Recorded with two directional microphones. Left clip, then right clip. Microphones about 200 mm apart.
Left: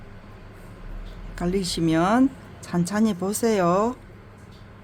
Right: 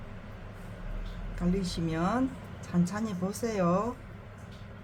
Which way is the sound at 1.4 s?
55° left (ahead or behind).